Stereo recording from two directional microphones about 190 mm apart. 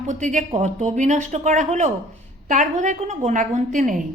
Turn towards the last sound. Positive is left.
turn(degrees=-40)  # may be behind; listen again after turning